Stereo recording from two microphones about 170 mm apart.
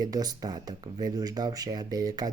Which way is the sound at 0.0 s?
20° right (ahead or behind).